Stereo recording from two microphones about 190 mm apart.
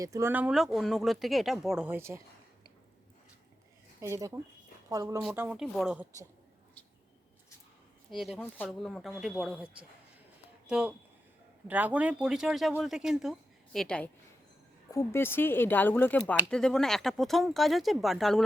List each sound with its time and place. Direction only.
0.0 s speech: 15° right (ahead or behind)
4.0 s speech: 15° right (ahead or behind)
8.1 s speech: 5° right (ahead or behind)
10.7 s speech: 5° right (ahead or behind)